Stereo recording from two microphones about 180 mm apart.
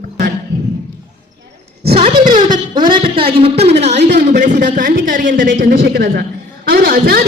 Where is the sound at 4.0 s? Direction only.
65° right (ahead or behind).